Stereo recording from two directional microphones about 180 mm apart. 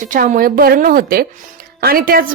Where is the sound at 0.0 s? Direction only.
45° right (ahead or behind).